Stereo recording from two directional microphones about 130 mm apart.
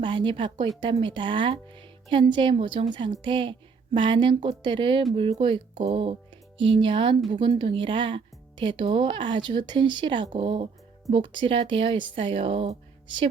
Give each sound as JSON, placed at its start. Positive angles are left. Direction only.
{"t": 0.0, "sound": "speech", "side_deg": -40}